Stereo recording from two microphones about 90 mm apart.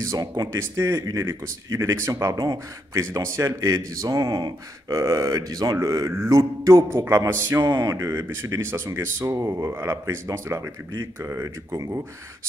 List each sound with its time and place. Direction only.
0.0 s a man's voice: 40° right (ahead or behind); by 11.5 s 25° right (ahead or behind)
11.7 s a man's voice: 40° right (ahead or behind)